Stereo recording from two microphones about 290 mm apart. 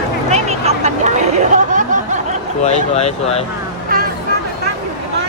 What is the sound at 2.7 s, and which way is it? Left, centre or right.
Speech, left.